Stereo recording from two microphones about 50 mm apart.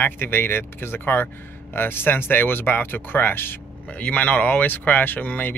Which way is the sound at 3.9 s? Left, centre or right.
Left.